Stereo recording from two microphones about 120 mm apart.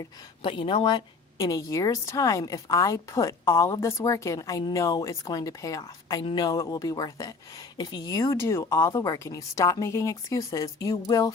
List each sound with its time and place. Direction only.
0.4 s a woman's voice: 45° left (ahead or behind)